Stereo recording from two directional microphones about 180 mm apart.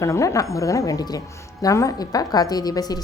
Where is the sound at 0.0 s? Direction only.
15° left (ahead or behind).